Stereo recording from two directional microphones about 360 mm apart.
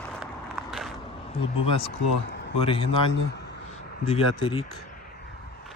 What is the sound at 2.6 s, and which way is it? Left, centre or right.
Speech, centre.